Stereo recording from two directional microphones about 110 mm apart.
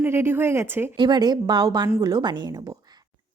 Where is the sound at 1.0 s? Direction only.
40° right (ahead or behind).